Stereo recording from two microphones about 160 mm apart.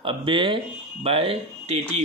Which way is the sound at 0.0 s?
30° right (ahead or behind).